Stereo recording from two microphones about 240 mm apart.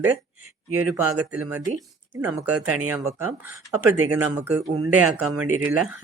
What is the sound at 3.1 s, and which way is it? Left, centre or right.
Speech, centre.